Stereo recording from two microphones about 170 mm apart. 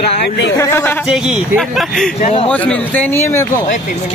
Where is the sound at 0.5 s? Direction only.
15° left (ahead or behind).